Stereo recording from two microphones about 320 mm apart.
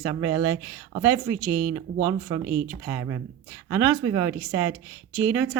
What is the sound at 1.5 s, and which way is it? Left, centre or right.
Speech, right.